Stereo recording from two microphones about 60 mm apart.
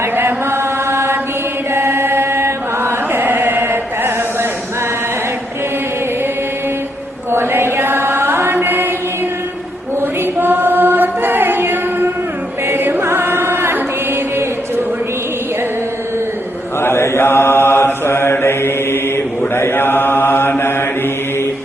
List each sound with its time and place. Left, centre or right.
0.0 s chant: right
7.3 s chant: right
10.0 s chant: right
16.8 s mantra: left